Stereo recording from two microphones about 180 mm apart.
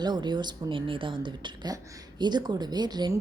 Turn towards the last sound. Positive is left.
turn(degrees=-25)  # may be behind; listen again after turning